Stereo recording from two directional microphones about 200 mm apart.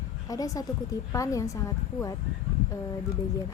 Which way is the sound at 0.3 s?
15° left (ahead or behind).